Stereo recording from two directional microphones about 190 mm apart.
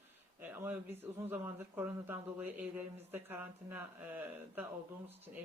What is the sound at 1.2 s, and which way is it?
Speech, 10° right (ahead or behind).